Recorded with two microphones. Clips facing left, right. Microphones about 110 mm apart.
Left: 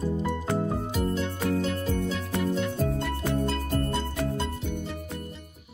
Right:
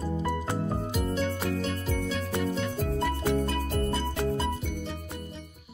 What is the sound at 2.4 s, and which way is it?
Music, centre (ahead or behind).